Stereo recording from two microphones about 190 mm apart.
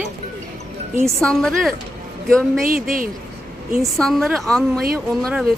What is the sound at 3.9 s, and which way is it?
Speech, centre (ahead or behind).